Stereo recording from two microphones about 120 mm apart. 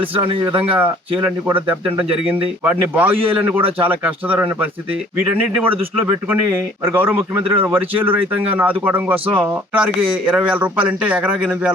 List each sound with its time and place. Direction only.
0.5 s speech: 50° right (ahead or behind)
1.2 s speech: 15° right (ahead or behind)